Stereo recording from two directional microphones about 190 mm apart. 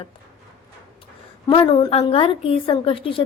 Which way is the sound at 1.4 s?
25° left (ahead or behind).